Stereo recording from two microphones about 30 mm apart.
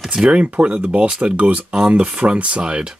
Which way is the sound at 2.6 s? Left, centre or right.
Right.